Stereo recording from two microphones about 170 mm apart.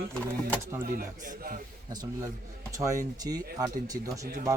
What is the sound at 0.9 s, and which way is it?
Speech, 50° right (ahead or behind).